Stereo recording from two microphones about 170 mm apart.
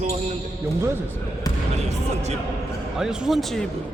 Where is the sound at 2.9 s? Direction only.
5° right (ahead or behind).